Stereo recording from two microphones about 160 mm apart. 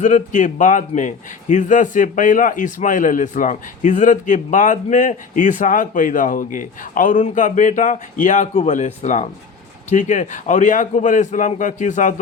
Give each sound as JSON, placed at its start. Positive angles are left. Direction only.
{"t": 0.0, "sound": "a man's voice", "side_deg": 50}